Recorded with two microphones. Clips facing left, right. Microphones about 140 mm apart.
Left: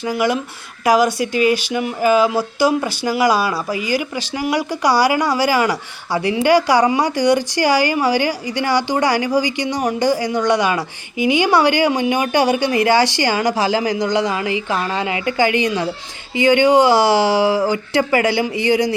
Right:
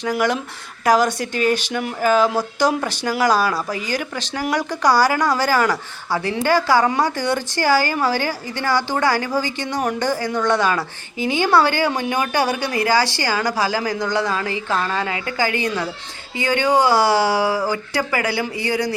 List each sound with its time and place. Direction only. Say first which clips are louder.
0.0 s speech: left 2 dB; 5° left (ahead or behind)